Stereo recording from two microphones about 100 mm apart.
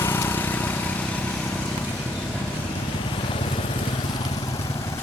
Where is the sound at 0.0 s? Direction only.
25° left (ahead or behind).